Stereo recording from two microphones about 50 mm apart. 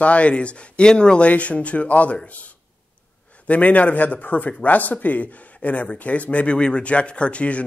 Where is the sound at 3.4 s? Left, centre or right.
Left.